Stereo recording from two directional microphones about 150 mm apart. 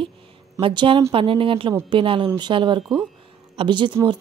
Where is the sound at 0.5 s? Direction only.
35° right (ahead or behind).